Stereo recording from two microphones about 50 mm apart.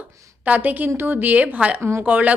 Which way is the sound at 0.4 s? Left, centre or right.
Right.